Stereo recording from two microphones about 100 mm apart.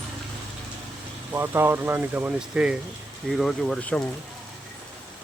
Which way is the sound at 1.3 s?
25° right (ahead or behind).